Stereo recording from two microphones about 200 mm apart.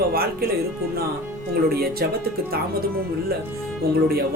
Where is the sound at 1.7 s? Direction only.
50° right (ahead or behind).